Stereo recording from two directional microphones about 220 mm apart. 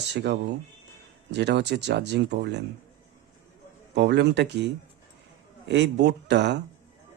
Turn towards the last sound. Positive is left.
turn(degrees=-50)  # may be behind; listen again after turning